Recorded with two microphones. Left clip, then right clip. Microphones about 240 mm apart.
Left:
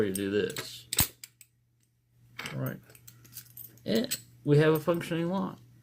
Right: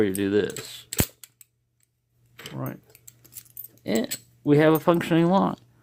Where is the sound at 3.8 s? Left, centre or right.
Right.